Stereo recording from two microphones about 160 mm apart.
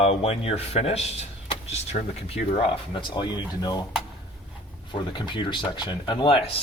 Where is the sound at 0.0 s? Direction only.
40° left (ahead or behind).